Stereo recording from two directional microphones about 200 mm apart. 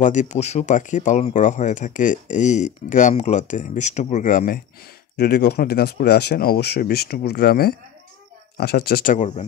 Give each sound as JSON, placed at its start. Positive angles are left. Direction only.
{"t": 0.0, "sound": "speech", "side_deg": 40}
{"t": 5.1, "sound": "speech", "side_deg": 55}